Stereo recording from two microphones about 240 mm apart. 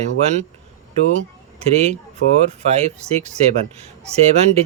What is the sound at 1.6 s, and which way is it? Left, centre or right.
Speech, right.